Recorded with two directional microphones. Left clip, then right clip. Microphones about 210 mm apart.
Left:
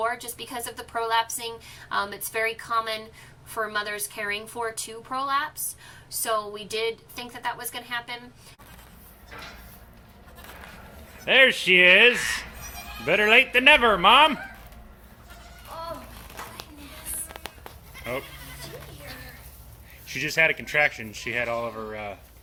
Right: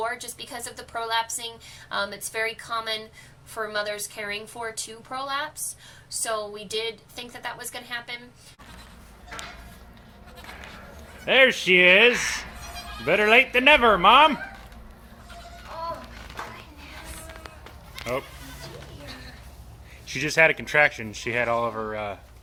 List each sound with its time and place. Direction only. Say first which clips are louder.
0.0 s a woman's voice: left 2 dB; centre (ahead or behind)
11.3 s a woman's voice: even; centre (ahead or behind)
20.1 s speech: right 2 dB; 10° right (ahead or behind)